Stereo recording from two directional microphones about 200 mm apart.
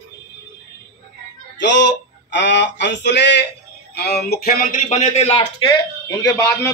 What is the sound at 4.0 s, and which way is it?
Speech, 55° left (ahead or behind).